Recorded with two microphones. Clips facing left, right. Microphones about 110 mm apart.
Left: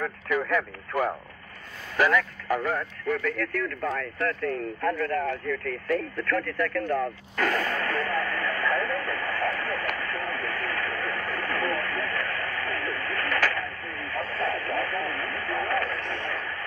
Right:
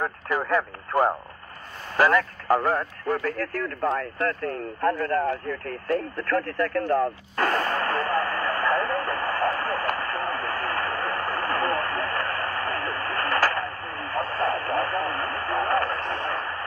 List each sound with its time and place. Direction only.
0.0 s radio: 40° right (ahead or behind)
2.0 s speech: 40° right (ahead or behind)
3.9 s a sound: 35° right (ahead or behind)